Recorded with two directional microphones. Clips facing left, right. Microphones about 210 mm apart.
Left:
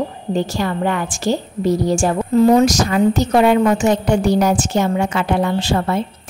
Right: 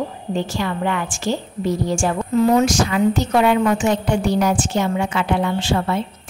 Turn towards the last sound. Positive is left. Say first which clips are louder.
# left 2 dB
turn(degrees=40)  # may be behind; listen again after turning